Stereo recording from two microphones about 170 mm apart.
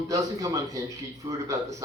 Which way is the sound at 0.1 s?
20° right (ahead or behind).